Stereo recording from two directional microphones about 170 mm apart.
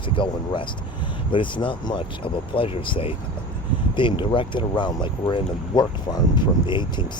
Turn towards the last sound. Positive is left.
turn(degrees=25)  # may be behind; listen again after turning